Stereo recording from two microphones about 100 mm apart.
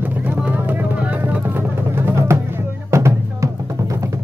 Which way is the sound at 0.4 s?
15° right (ahead or behind).